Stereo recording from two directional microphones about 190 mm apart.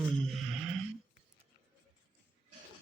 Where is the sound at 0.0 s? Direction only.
Centre (ahead or behind).